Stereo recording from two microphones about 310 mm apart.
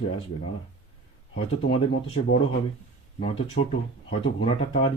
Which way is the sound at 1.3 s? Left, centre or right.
Centre.